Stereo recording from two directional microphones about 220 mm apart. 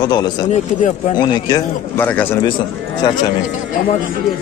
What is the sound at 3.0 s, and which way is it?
Speech, 20° left (ahead or behind).